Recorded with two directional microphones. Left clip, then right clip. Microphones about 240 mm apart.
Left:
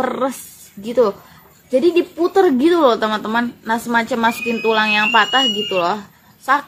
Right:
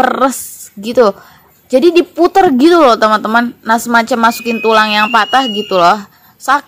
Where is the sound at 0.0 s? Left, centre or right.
Right.